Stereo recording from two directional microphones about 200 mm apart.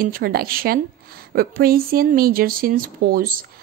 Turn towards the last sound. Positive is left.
turn(degrees=-45)  # may be behind; listen again after turning